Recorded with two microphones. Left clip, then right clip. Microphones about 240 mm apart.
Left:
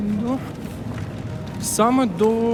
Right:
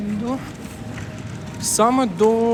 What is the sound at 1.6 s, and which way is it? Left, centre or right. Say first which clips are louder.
Speech: right 1 dB; centre.